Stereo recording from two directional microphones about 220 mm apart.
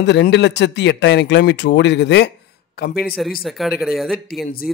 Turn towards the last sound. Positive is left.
turn(degrees=0)  # may be behind; listen again after turning